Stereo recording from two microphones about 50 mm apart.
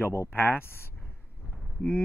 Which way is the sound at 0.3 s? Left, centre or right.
Left.